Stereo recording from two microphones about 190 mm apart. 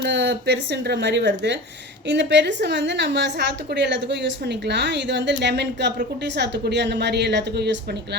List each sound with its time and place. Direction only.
0.0 s a woman's voice: 65° right (ahead or behind)